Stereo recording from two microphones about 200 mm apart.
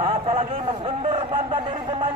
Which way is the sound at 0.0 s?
30° right (ahead or behind).